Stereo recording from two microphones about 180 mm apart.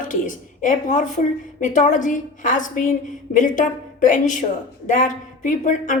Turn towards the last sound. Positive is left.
turn(degrees=45)  # may be behind; listen again after turning